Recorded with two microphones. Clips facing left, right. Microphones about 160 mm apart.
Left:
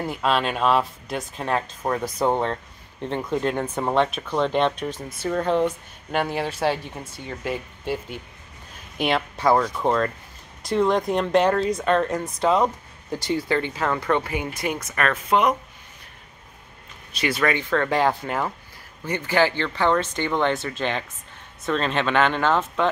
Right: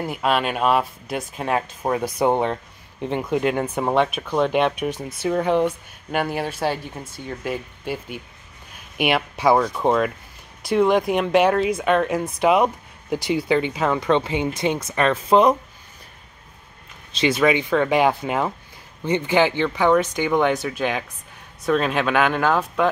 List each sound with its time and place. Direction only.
0.0 s speech: 5° right (ahead or behind); by 15.5 s 30° right (ahead or behind)
17.1 s speech: 20° right (ahead or behind)